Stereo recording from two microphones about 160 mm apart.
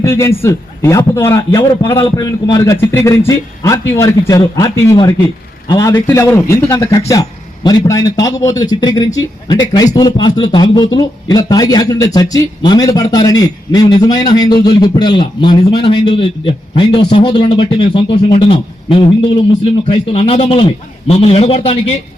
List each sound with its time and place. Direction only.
0.0 s a man's voice: 15° left (ahead or behind); by 21.9 s 40° left (ahead or behind)